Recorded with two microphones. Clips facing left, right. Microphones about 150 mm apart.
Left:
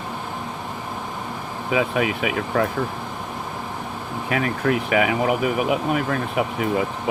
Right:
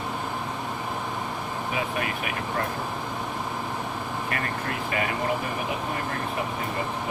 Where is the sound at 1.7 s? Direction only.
90° left.